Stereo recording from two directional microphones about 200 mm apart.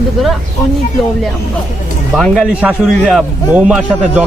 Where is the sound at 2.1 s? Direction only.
Centre (ahead or behind).